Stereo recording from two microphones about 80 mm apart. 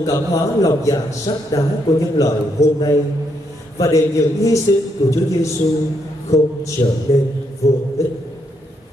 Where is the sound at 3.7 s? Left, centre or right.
Left.